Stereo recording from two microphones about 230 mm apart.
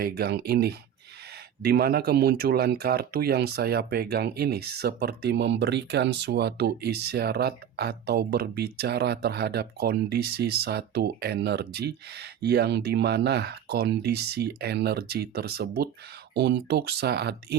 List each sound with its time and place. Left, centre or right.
0.0 s speech: right